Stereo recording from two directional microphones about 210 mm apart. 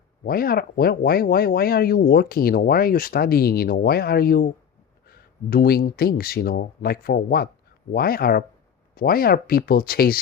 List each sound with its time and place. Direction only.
0.3 s speech: 45° left (ahead or behind)